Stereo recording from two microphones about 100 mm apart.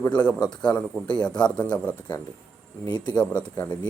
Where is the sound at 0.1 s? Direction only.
10° left (ahead or behind).